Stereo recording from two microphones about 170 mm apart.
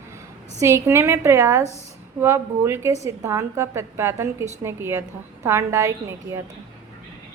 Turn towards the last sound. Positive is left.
turn(degrees=-15)  # may be behind; listen again after turning